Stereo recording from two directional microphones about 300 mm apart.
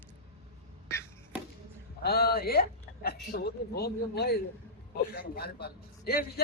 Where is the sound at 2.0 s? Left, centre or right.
Left.